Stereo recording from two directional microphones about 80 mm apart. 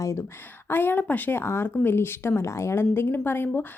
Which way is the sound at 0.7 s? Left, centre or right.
Left.